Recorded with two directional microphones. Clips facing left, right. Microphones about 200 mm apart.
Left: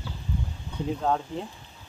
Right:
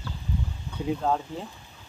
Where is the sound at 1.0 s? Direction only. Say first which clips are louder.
Left 1 dB; centre (ahead or behind).